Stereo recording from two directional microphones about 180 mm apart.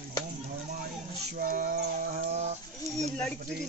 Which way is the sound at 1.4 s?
45° right (ahead or behind).